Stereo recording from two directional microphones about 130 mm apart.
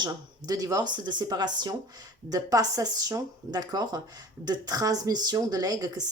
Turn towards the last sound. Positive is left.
turn(degrees=-30)  # may be behind; listen again after turning